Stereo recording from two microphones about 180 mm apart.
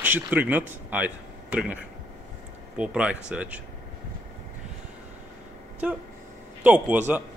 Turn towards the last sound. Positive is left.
turn(degrees=-10)  # may be behind; listen again after turning